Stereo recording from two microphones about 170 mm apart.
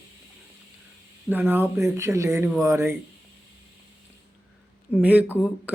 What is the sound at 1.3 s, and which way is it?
Speech, 10° right (ahead or behind).